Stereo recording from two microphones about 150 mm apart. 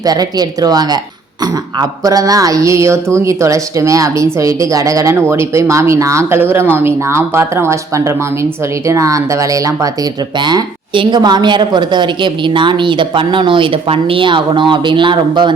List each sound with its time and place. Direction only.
0.0 s speech: 25° right (ahead or behind)